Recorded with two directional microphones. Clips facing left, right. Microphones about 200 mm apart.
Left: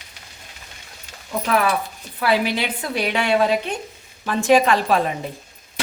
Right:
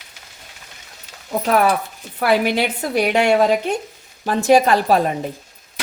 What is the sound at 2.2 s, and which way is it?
A woman's voice, 45° right (ahead or behind).